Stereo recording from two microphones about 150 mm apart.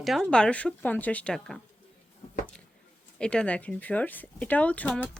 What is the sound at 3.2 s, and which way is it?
Speech, 5° left (ahead or behind).